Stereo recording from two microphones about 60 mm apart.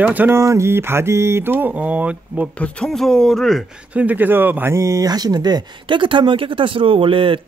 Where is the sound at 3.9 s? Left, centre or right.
Right.